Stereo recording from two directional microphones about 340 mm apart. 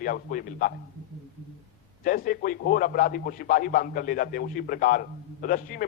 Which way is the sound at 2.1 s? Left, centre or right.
Left.